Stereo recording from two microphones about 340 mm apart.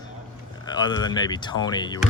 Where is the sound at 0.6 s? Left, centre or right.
Centre.